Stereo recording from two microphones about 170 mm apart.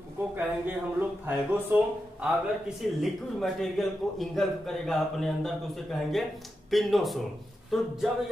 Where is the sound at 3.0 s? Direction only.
Centre (ahead or behind).